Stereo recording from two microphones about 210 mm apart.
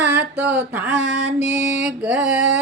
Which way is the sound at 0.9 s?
30° left (ahead or behind).